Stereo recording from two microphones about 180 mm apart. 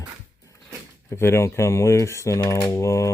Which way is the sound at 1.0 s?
15° left (ahead or behind).